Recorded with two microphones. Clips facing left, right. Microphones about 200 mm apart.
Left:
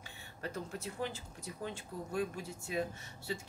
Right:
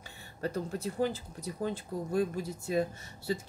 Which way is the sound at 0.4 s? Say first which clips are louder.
Right 7 dB; 35° right (ahead or behind).